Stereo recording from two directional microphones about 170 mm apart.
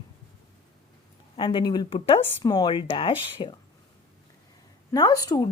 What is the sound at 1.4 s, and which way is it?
Speech, 30° left (ahead or behind).